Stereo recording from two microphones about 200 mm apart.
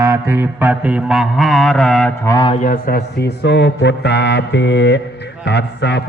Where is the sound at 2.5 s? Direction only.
40° left (ahead or behind); by 6.0 s 60° left (ahead or behind).